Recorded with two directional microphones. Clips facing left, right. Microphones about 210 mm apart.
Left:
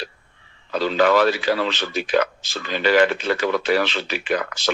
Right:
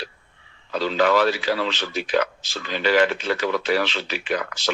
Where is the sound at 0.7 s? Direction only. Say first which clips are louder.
Left 2 dB; 50° left (ahead or behind).